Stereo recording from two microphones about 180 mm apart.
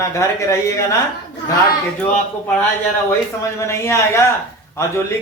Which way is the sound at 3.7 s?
15° left (ahead or behind).